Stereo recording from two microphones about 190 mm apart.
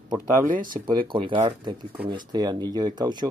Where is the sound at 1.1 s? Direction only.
30° right (ahead or behind).